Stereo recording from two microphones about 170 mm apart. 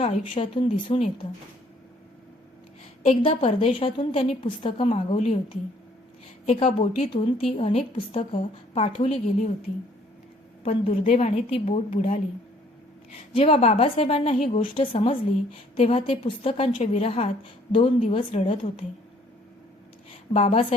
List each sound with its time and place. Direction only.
0.0 s a woman's voice: 40° left (ahead or behind)
3.0 s a woman's voice: 35° left (ahead or behind)
6.4 s a woman's voice: 40° left (ahead or behind)
10.6 s a woman's voice: 35° left (ahead or behind)
13.3 s a woman's voice: 35° left (ahead or behind)
20.3 s a woman's voice: 35° left (ahead or behind)